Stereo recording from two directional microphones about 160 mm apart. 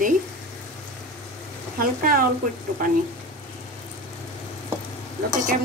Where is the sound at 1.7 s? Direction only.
65° right (ahead or behind).